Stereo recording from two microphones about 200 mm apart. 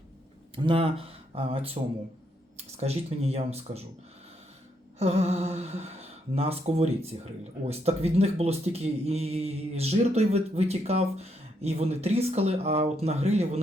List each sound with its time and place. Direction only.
0.5 s speech: 25° right (ahead or behind)
4.9 s speech: 30° right (ahead or behind)